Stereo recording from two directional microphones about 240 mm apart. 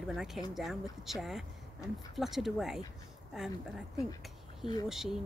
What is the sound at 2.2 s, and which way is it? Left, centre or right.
A woman's voice, centre.